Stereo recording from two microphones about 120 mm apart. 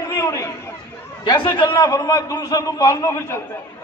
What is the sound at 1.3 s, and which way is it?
A man's voice, 40° left (ahead or behind).